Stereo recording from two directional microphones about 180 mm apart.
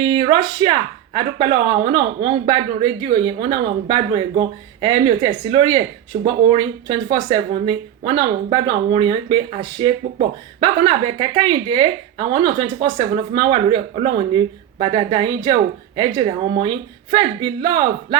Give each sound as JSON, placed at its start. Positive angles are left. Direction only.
{"t": 0.0, "sound": "speech", "side_deg": -30}